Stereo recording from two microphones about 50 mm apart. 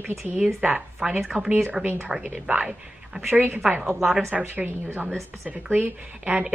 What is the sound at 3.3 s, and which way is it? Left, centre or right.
Speech, right.